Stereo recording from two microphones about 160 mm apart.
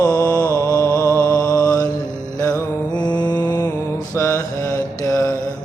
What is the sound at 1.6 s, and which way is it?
Mantra, 20° left (ahead or behind).